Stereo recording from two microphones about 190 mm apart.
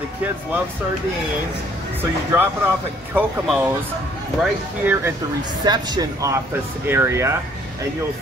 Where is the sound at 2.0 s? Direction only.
10° right (ahead or behind).